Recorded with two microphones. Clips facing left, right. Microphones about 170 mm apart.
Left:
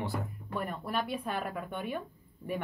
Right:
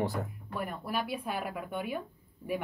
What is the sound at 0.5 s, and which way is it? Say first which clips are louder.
Speech: left 1 dB; 5° right (ahead or behind).